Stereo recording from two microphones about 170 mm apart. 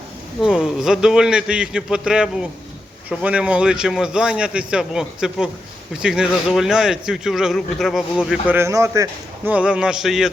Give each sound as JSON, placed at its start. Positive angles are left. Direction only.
{"t": 0.4, "sound": "a man's voice", "side_deg": -5}
{"t": 8.3, "sound": "a man's voice", "side_deg": -10}
{"t": 9.5, "sound": "a man's voice", "side_deg": -5}